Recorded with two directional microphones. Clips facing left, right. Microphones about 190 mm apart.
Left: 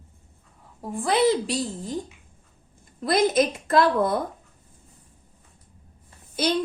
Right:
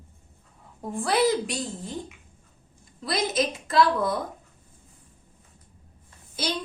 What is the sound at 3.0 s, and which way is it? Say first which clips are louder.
A woman's voice: left 6 dB; 50° left (ahead or behind).